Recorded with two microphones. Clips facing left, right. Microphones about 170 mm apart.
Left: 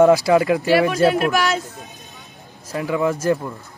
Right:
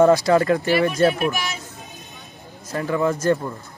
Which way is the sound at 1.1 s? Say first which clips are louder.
Left 4 dB; 90° left.